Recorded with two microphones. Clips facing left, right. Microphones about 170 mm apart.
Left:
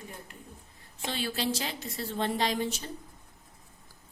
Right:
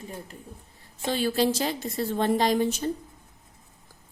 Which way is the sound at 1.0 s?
45° right (ahead or behind).